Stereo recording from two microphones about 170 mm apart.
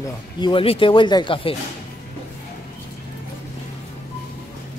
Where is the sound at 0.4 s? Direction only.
30° left (ahead or behind).